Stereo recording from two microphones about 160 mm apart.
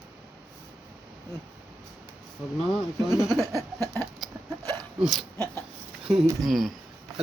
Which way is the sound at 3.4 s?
20° right (ahead or behind).